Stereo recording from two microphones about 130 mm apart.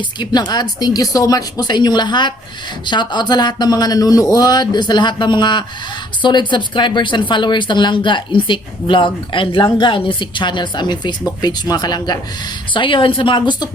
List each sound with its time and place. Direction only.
0.2 s speech: 35° left (ahead or behind)